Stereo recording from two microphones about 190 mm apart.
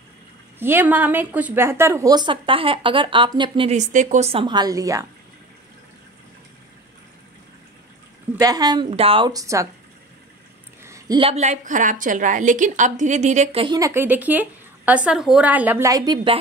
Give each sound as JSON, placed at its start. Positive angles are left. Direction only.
{"t": 0.6, "sound": "a woman's voice", "side_deg": -10}
{"t": 8.4, "sound": "a woman's voice", "side_deg": -20}
{"t": 10.8, "sound": "a woman's voice", "side_deg": -15}
{"t": 13.7, "sound": "a woman's voice", "side_deg": -15}